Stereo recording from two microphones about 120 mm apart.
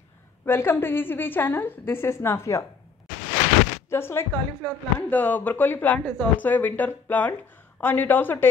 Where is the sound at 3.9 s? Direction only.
20° left (ahead or behind).